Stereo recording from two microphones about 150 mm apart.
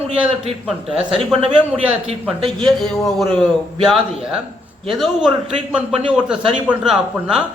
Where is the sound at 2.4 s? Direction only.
35° right (ahead or behind).